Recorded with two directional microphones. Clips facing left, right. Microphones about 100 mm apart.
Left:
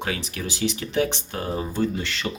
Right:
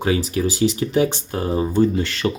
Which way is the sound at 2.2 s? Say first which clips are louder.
Right 10 dB; 90° right.